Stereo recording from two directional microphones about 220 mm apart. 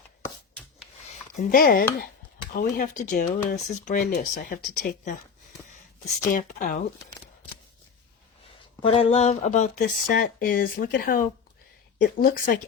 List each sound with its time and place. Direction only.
1.0 s speech: 35° left (ahead or behind)
3.5 s speech: 45° left (ahead or behind)
6.3 s speech: 40° left (ahead or behind)
8.8 s speech: 25° left (ahead or behind); by 12.5 s 40° left (ahead or behind)